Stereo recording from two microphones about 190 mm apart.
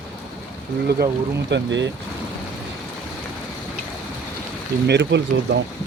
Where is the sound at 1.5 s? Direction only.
70° right (ahead or behind).